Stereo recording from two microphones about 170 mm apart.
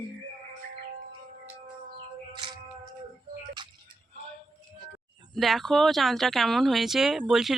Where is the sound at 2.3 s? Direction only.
25° right (ahead or behind).